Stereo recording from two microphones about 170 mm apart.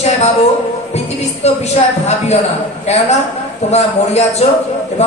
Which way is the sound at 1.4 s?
40° left (ahead or behind).